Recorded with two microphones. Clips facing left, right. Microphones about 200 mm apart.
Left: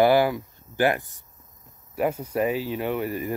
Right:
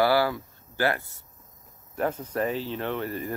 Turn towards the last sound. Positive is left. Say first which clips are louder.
# left 3 dB
turn(degrees=10)  # may be behind; listen again after turning